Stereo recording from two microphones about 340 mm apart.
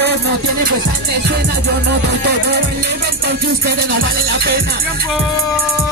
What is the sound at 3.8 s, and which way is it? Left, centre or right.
Music, right.